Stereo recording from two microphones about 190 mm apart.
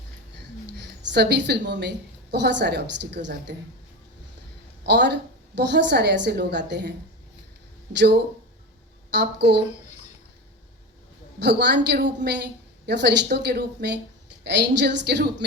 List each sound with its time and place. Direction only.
0.7 s a woman's voice: 65° right (ahead or behind)
4.8 s a woman's voice: 65° right (ahead or behind)
7.9 s a woman's voice: 65° right (ahead or behind)
11.3 s a woman's voice: 65° right (ahead or behind)